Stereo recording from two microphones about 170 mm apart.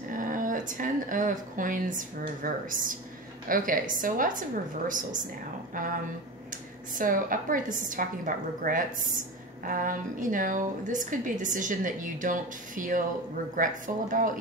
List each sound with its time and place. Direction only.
0.1 s a woman's voice: 50° right (ahead or behind)
7.0 s a woman's voice: 55° right (ahead or behind)